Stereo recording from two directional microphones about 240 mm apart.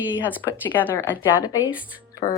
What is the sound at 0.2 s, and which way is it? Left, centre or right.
Speech, centre.